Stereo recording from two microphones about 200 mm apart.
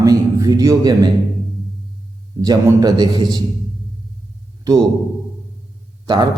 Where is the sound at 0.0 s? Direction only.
15° right (ahead or behind).